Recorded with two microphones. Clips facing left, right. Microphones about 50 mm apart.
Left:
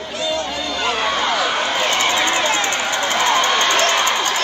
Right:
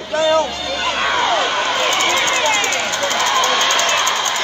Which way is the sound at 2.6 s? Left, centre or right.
Centre.